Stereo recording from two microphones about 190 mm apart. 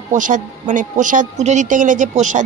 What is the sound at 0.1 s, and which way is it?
Speech, 45° right (ahead or behind).